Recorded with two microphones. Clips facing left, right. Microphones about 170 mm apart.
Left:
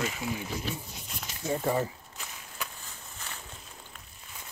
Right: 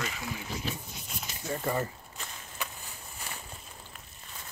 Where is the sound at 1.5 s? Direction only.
5° left (ahead or behind).